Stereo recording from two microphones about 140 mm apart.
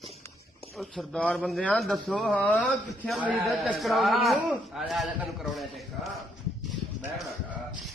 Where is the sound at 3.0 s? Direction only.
5° right (ahead or behind).